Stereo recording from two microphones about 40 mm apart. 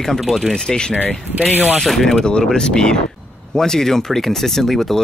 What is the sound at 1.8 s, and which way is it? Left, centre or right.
Speech, centre.